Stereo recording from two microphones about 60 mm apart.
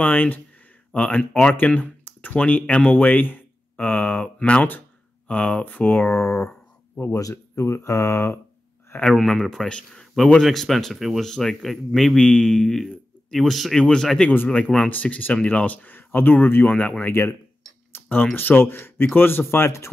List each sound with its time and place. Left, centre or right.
0.0 s speech: left
4.4 s speech: centre
5.9 s speech: left
7.2 s speech: left
9.0 s speech: centre
10.4 s speech: centre
11.2 s speech: centre
13.7 s speech: centre
14.9 s speech: left
17.0 s speech: left
19.4 s speech: left